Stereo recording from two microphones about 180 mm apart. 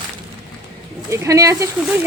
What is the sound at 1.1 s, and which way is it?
Speech, 15° right (ahead or behind).